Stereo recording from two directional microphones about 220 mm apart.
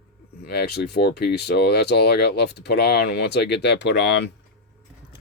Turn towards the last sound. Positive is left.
turn(degrees=50)  # may be behind; listen again after turning